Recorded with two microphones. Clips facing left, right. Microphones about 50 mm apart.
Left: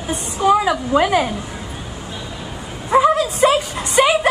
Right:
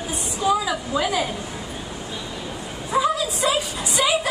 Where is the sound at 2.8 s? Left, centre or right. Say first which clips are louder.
Left 7 dB; left.